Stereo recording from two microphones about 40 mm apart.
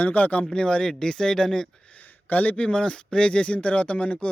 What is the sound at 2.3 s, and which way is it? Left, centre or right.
Speech, left.